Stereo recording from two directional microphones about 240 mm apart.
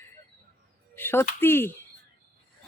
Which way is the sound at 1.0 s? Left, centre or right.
Centre.